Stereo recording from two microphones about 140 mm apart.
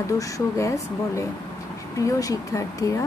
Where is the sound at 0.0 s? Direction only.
20° left (ahead or behind).